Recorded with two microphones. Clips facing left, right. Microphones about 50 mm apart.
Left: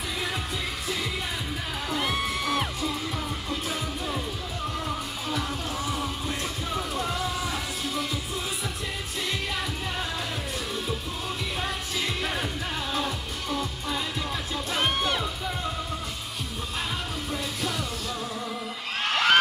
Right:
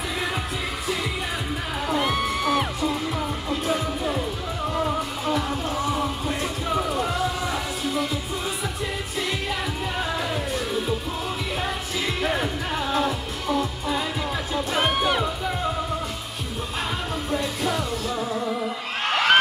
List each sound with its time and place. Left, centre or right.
1.9 s music: centre
2.9 s music: centre
12.2 s music: centre
17.3 s music: centre
19.0 s crowd: centre